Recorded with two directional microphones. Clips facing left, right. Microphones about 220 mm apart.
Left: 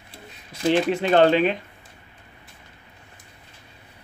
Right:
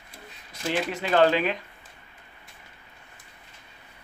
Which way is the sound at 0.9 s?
25° left (ahead or behind).